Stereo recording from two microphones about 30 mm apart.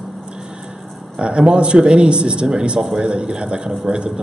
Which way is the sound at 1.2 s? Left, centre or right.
Right.